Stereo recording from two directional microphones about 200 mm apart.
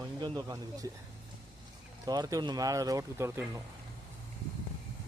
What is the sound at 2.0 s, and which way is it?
Speech, 20° right (ahead or behind).